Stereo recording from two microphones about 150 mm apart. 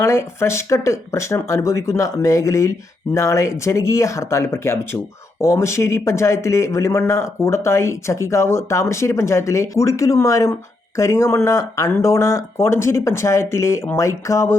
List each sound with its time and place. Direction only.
0.0 s speech: 20° left (ahead or behind)